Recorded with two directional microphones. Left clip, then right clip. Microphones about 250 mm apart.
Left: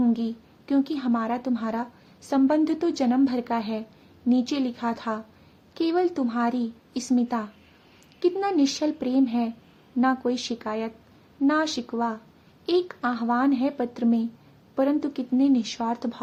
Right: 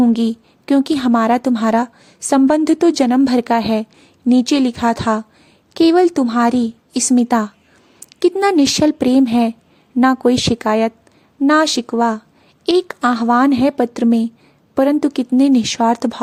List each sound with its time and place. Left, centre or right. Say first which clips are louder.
0.0 s a woman's voice: right 10 dB; right